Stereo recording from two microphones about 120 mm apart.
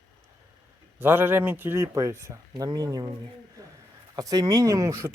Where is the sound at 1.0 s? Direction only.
20° right (ahead or behind).